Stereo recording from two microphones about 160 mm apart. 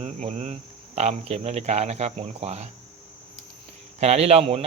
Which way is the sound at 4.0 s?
40° right (ahead or behind).